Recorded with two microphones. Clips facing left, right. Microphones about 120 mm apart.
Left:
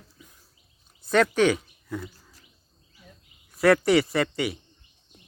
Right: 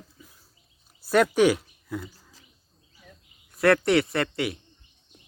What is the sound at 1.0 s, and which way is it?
Speech, 5° right (ahead or behind).